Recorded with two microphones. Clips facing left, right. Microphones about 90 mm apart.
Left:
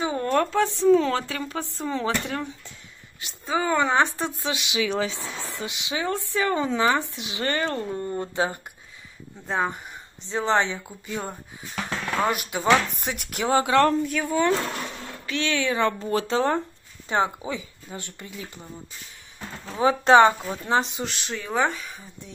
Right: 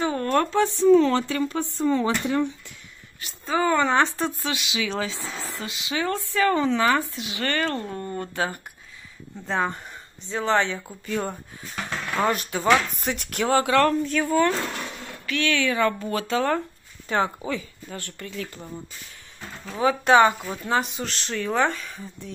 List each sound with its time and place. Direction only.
0.0 s speech: 15° left (ahead or behind); by 2.4 s 5° right (ahead or behind)
3.4 s speech: 10° left (ahead or behind)
10.2 s speech: 25° left (ahead or behind)
14.2 s speech: 10° left (ahead or behind)
15.2 s speech: 25° left (ahead or behind)
19.6 s speech: 30° left (ahead or behind); by 22.3 s 15° left (ahead or behind)